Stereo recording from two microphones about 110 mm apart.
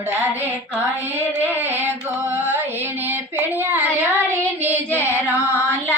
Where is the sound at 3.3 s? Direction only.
15° right (ahead or behind).